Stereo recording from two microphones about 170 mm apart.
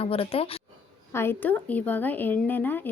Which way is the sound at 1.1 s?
15° left (ahead or behind).